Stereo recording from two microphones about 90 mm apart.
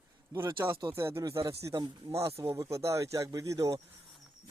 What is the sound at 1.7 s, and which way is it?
Speech, 50° right (ahead or behind).